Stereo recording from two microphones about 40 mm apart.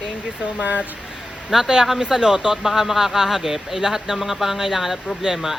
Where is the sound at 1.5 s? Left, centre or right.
Centre.